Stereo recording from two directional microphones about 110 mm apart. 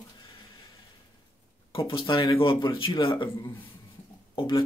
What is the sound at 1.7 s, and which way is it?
Speech, 50° left (ahead or behind).